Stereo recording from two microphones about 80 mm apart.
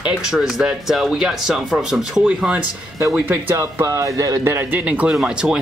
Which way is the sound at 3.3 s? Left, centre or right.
Right.